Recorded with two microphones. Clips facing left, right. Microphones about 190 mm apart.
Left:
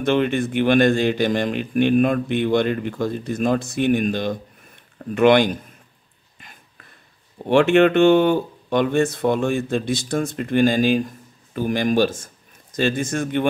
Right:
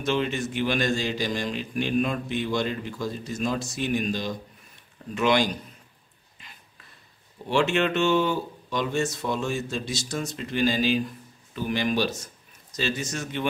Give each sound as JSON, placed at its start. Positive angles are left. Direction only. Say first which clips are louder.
{"t": 0.0, "sound": "speech", "louder": "left 7 dB", "side_deg": 55}
{"t": 6.4, "sound": "dog", "louder": "left 4 dB", "side_deg": 50}
{"t": 7.4, "sound": "a man's voice", "louder": "left 9 dB", "side_deg": 55}